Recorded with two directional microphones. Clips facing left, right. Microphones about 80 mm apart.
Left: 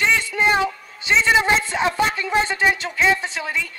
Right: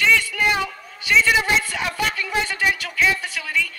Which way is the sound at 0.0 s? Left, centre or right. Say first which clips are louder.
Even; left.